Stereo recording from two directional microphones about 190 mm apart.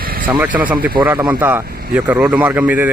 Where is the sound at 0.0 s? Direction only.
50° right (ahead or behind).